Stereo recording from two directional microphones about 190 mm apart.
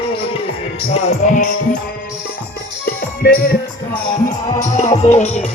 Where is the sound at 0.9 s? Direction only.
35° left (ahead or behind).